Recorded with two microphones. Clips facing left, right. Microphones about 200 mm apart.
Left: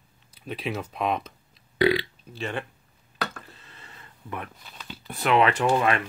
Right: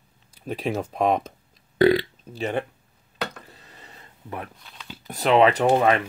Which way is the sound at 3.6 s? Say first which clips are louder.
Right 2 dB; 40° right (ahead or behind).